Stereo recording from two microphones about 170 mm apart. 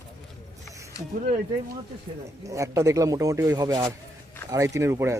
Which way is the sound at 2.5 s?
20° right (ahead or behind).